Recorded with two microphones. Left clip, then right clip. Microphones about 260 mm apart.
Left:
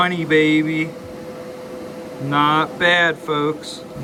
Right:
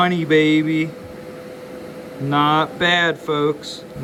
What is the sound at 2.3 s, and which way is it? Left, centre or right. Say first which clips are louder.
Speech: even; centre.